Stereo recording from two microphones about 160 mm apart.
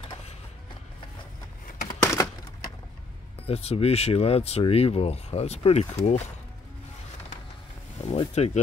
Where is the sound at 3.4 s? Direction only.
40° left (ahead or behind).